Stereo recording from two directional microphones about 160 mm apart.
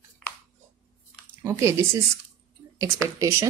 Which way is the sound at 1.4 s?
15° right (ahead or behind).